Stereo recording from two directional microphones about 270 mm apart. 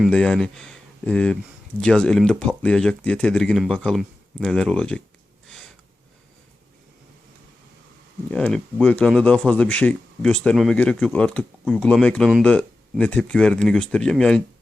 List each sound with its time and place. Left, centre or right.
0.0 s speech: centre
5.5 s a sound: centre
8.3 s speech: centre